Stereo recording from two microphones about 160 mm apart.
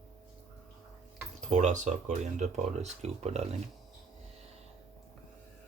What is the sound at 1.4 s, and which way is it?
Speech, 50° right (ahead or behind).